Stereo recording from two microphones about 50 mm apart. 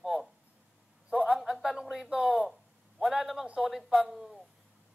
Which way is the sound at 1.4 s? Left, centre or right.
Centre.